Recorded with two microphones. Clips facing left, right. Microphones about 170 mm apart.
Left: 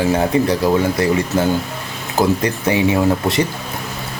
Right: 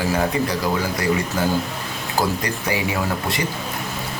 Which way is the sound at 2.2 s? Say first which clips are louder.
Left 6 dB; 25° left (ahead or behind).